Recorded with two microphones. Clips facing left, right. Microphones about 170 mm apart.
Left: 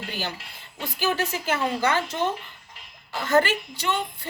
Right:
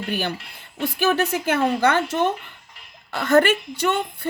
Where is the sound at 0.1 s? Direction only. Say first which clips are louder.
Right 10 dB; 60° right (ahead or behind).